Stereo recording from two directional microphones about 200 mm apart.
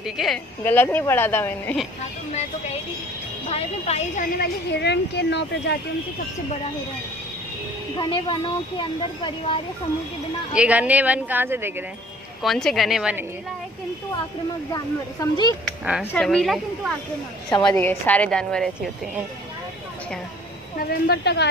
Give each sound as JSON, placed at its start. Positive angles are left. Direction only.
{"t": 0.0, "sound": "a woman's voice", "side_deg": 0}
{"t": 0.7, "sound": "a woman's voice", "side_deg": 10}
{"t": 3.4, "sound": "speech", "side_deg": 30}
{"t": 4.4, "sound": "speech", "side_deg": 55}
{"t": 8.0, "sound": "speech", "side_deg": 25}
{"t": 10.5, "sound": "a woman's voice", "side_deg": -5}
{"t": 12.4, "sound": "a woman's voice", "side_deg": 0}
{"t": 14.7, "sound": "speech", "side_deg": 20}
{"t": 15.8, "sound": "a woman's voice", "side_deg": -5}
{"t": 17.5, "sound": "speech", "side_deg": 20}
{"t": 17.7, "sound": "a woman's voice", "side_deg": 10}
{"t": 20.8, "sound": "speech", "side_deg": 50}